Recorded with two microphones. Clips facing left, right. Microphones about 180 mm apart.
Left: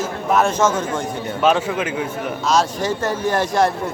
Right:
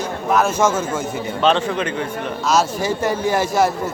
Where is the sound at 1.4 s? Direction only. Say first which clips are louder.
Even; 5° left (ahead or behind).